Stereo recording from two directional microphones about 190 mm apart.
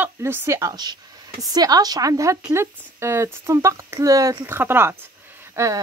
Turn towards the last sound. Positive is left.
turn(degrees=-15)  # may be behind; listen again after turning